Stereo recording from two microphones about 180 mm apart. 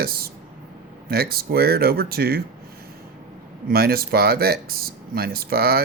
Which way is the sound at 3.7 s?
55° right (ahead or behind).